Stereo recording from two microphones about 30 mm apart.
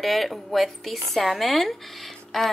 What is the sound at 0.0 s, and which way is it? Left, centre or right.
Speech, centre.